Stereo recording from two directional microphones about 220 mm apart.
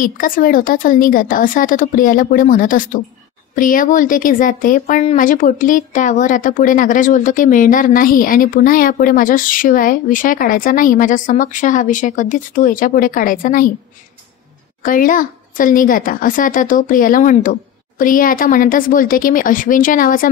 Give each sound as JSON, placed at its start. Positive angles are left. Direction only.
{"t": 0.0, "sound": "speech", "side_deg": 40}
{"t": 14.8, "sound": "speech", "side_deg": 35}